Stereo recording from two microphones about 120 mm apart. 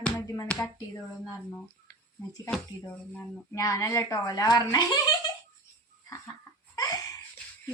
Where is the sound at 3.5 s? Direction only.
30° left (ahead or behind).